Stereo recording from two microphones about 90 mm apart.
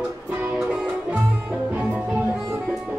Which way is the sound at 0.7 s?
10° right (ahead or behind).